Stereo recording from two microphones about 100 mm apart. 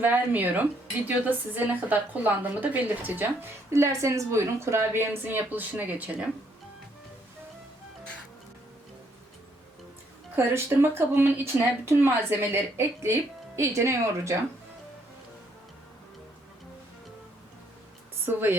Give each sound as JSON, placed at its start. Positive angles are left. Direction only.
{"t": 0.0, "sound": "a woman's voice", "side_deg": -15}
{"t": 3.7, "sound": "speech", "side_deg": -30}
{"t": 10.3, "sound": "speech", "side_deg": -25}
{"t": 18.3, "sound": "speech", "side_deg": -20}